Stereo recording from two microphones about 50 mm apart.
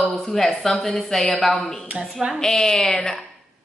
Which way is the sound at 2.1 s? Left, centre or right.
Centre.